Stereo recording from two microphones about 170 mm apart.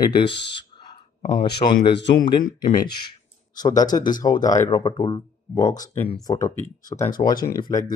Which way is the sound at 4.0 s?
50° left (ahead or behind).